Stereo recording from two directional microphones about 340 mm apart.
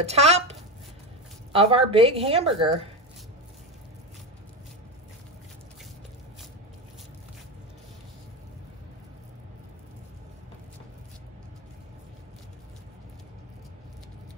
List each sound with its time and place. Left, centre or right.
0.0 s a woman's voice: centre